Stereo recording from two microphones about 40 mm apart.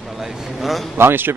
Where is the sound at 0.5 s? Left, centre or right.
Centre.